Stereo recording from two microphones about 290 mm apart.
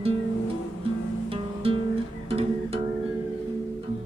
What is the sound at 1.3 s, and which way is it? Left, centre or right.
Music, centre.